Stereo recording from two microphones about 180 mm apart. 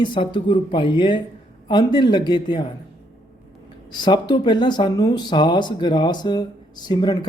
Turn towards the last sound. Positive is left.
turn(degrees=25)  # may be behind; listen again after turning